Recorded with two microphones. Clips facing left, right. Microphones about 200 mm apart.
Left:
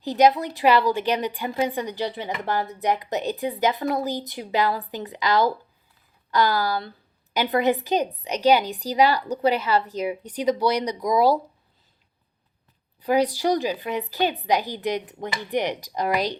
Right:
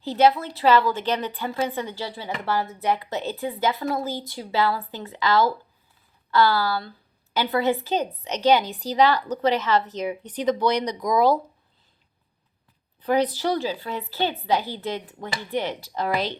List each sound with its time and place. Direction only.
0.0 s a woman's voice: 15° left (ahead or behind)
13.0 s a woman's voice: 10° left (ahead or behind)